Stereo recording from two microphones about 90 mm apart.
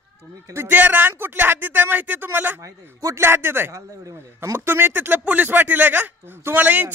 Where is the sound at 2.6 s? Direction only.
40° right (ahead or behind).